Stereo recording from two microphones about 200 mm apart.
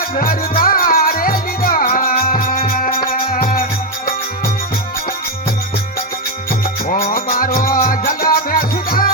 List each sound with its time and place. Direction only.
0.2 s music: 45° left (ahead or behind)
6.8 s music: 45° left (ahead or behind)